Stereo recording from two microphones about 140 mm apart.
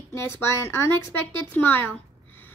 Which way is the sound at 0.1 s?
20° left (ahead or behind).